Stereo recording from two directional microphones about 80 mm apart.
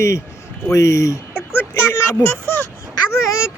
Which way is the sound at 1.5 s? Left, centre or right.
Left.